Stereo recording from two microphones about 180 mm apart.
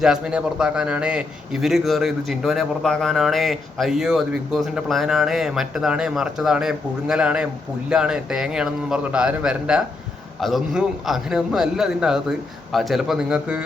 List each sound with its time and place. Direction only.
0.0 s a man's voice: 5° right (ahead or behind)